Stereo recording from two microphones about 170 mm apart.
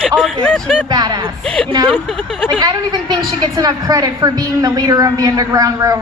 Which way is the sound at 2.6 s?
25° right (ahead or behind).